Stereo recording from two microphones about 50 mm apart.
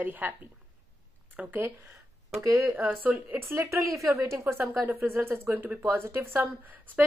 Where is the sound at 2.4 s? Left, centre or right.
Right.